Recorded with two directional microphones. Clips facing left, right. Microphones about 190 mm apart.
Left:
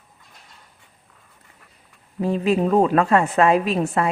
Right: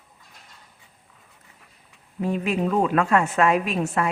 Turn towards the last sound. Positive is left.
turn(degrees=35)  # may be behind; listen again after turning